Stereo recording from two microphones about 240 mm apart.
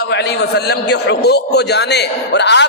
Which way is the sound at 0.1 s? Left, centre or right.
Left.